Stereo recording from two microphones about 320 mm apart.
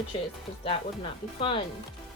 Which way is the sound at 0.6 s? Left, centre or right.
Centre.